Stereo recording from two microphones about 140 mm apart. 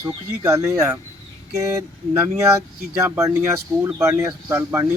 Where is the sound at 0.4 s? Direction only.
20° right (ahead or behind).